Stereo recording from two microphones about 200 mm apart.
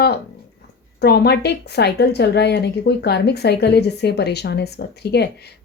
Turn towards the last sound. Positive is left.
turn(degrees=55)  # may be behind; listen again after turning